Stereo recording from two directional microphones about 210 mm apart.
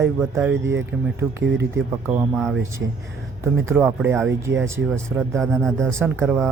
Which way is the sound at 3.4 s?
10° right (ahead or behind).